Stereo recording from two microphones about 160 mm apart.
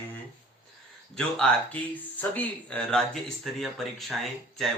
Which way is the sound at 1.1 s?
5° left (ahead or behind).